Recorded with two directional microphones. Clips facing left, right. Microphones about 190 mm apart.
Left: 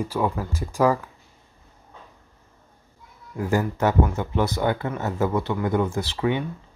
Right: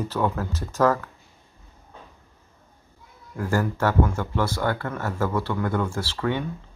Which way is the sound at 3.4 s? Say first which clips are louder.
Left 1 dB; 15° left (ahead or behind).